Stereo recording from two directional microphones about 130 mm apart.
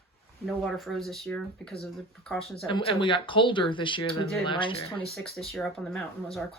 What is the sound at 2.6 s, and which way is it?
Speech, 40° left (ahead or behind).